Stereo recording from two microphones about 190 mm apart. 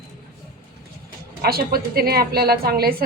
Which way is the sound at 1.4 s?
55° right (ahead or behind).